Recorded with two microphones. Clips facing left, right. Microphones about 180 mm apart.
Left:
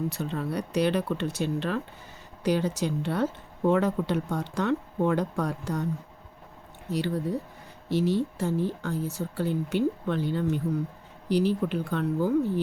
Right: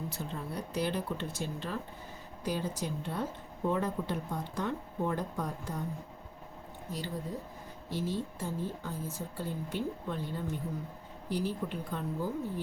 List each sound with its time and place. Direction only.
0.1 s speech: 75° left (ahead or behind)
6.9 s speech: 75° left (ahead or behind)